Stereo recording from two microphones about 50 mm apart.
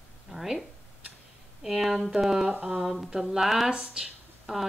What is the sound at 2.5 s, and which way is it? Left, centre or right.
Speech, right.